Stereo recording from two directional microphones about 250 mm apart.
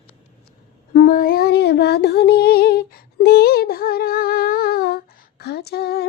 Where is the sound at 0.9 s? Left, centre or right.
Left.